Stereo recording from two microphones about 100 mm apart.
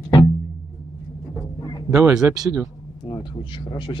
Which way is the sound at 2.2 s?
25° right (ahead or behind).